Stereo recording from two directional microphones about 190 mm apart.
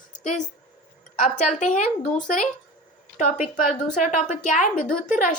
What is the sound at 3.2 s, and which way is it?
A woman's voice, 40° left (ahead or behind).